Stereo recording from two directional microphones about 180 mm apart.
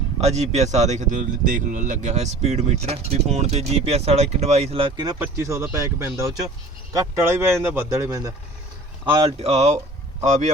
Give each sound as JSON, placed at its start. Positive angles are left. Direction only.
{"t": 0.2, "sound": "a man's voice", "side_deg": -35}
{"t": 9.1, "sound": "a man's voice", "side_deg": -30}